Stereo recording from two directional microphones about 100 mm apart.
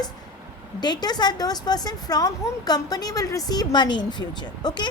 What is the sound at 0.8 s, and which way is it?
A woman's voice, 45° left (ahead or behind).